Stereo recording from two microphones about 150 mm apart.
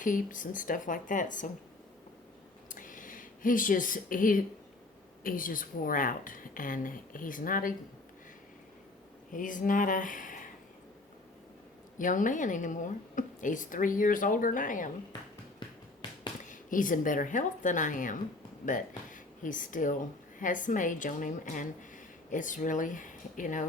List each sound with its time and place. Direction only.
0.0 s a woman's voice: 60° left (ahead or behind)
2.6 s a sound: 60° left (ahead or behind)
5.2 s a woman's voice: 65° left (ahead or behind)
9.3 s speech: 60° left (ahead or behind)
11.9 s a woman's voice: 60° left (ahead or behind)
16.4 s a woman's voice: 60° left (ahead or behind)